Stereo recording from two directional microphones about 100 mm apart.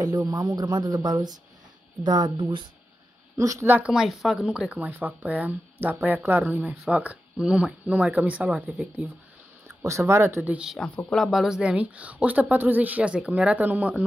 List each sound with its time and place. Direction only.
0.0 s speech: 40° right (ahead or behind)
3.3 s speech: 30° right (ahead or behind)
3.7 s speech: 10° right (ahead or behind)
9.7 s speech: 25° right (ahead or behind)
10.5 s speech: 5° right (ahead or behind)
11.0 s speech: 10° left (ahead or behind)
11.2 s speech: 5° right (ahead or behind)